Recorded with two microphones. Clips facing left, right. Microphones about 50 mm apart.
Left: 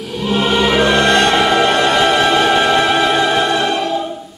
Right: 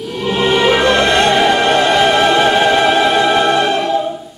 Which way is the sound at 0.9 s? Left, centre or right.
Right.